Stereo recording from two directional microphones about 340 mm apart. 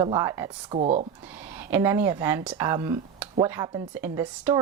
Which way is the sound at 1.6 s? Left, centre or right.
Centre.